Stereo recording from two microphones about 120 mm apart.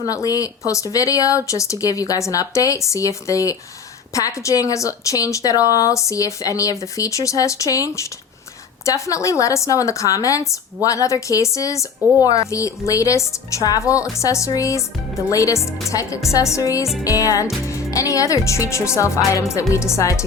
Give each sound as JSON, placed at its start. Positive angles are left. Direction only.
{"t": 0.0, "sound": "speech", "side_deg": 30}